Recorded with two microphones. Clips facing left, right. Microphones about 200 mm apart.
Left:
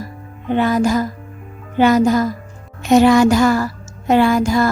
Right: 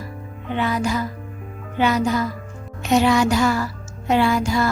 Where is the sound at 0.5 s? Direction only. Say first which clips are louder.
Left 7 dB; 45° left (ahead or behind).